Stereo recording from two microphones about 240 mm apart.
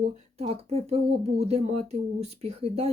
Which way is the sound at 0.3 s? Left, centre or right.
Right.